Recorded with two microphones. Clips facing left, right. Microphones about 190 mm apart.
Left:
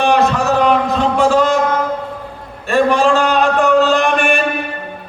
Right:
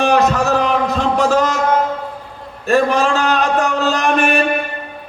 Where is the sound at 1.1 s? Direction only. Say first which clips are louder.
Left 2 dB; 40° right (ahead or behind).